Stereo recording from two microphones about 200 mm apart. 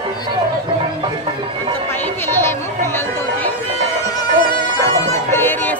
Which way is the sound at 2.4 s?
10° left (ahead or behind).